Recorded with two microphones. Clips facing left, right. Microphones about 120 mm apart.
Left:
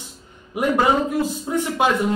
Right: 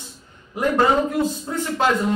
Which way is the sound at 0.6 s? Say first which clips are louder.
Even; 15° left (ahead or behind).